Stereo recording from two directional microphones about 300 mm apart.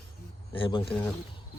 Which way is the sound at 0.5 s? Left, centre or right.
Centre.